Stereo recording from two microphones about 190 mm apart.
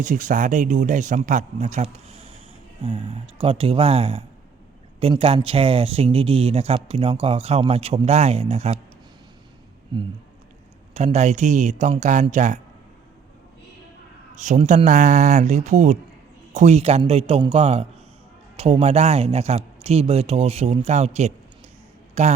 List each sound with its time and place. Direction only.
0.0 s speech: 45° right (ahead or behind)
9.9 s speech: 25° right (ahead or behind)
14.3 s speech: 40° right (ahead or behind)